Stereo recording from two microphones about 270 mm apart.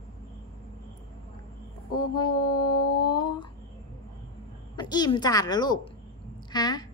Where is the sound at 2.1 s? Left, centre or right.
Centre.